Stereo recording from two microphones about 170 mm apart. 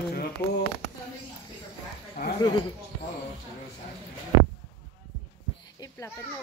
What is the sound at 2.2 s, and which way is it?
Speech, 65° left (ahead or behind).